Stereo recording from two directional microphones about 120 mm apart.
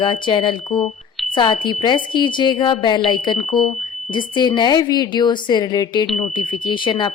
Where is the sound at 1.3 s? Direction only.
40° left (ahead or behind).